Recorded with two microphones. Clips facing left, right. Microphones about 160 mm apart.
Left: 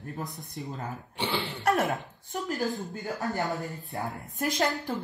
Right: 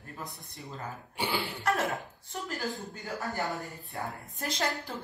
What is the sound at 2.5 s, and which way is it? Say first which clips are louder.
Speech: left 5 dB; 20° left (ahead or behind).